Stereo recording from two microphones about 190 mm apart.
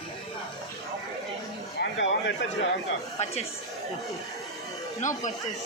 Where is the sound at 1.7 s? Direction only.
65° left (ahead or behind).